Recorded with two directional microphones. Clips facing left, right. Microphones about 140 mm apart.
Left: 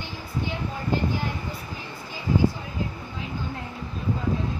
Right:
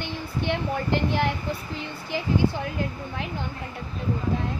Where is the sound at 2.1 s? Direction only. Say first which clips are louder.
Even; 75° right (ahead or behind).